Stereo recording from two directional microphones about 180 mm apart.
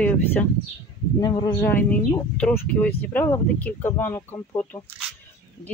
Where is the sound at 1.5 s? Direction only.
10° left (ahead or behind).